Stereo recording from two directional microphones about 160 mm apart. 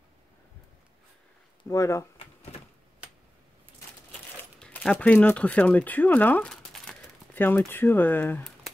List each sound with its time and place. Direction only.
1.6 s speech: 20° left (ahead or behind)
4.6 s speech: 5° left (ahead or behind)